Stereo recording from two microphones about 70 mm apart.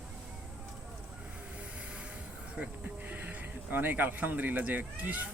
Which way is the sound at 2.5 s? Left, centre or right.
Centre.